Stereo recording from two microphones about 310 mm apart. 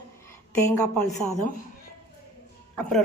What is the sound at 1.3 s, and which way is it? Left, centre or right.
Speech, left.